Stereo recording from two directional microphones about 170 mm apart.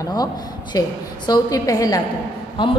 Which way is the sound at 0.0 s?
25° left (ahead or behind).